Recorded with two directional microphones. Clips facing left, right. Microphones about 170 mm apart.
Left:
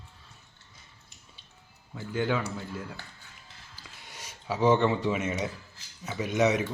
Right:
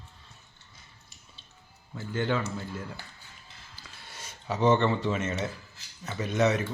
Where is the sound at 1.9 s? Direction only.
10° left (ahead or behind).